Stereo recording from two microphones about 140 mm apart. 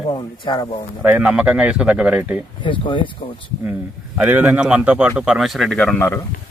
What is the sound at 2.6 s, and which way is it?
Speech, 35° left (ahead or behind).